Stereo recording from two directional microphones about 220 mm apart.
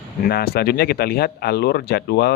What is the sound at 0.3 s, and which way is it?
Speech, 45° left (ahead or behind).